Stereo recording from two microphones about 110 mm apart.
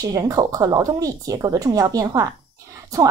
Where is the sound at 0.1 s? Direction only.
30° right (ahead or behind).